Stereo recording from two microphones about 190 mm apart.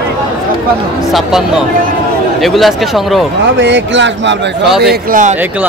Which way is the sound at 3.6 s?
70° right (ahead or behind).